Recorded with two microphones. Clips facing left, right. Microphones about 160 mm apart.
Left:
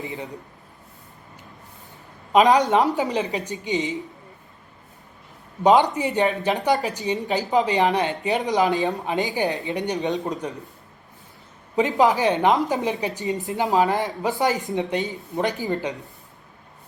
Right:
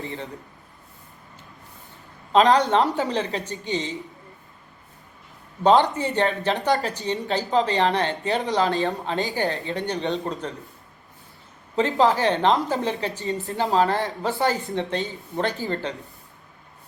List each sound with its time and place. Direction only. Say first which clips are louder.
0.0 s a woman's voice: left 1 dB; 20° left (ahead or behind)
2.3 s a woman's voice: left 1 dB; 15° left (ahead or behind)
5.6 s a woman's voice: left 1 dB; 15° left (ahead or behind)
11.8 s a woman's voice: left 1 dB; 15° left (ahead or behind)